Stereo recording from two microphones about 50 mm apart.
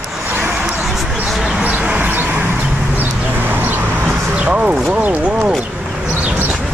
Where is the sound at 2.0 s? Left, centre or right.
Right.